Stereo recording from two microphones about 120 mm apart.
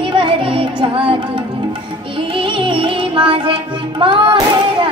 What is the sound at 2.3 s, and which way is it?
Music, 45° right (ahead or behind).